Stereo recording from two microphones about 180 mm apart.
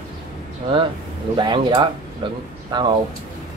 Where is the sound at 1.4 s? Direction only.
25° right (ahead or behind).